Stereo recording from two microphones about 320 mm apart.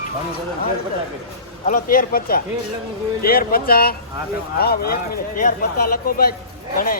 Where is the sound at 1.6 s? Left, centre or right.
Left.